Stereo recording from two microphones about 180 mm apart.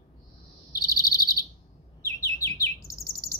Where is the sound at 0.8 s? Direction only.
20° left (ahead or behind).